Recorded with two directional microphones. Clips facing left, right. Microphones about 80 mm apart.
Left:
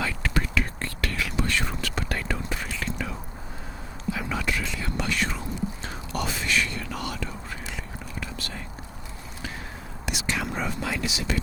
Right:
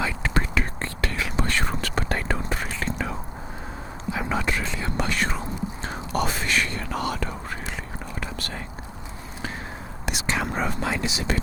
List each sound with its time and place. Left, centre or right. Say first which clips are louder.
0.3 s whispering: right 1 dB; right
1.5 s whispering: right 2 dB; right
10.1 s whispering: right 3 dB; right